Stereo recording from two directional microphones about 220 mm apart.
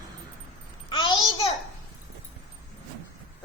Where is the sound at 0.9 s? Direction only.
20° left (ahead or behind).